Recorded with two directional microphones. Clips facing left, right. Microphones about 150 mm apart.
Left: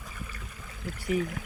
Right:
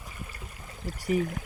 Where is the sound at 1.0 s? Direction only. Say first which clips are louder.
Right 2 dB; 40° right (ahead or behind).